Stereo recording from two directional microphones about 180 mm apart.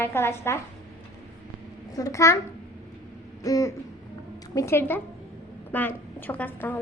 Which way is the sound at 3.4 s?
20° left (ahead or behind).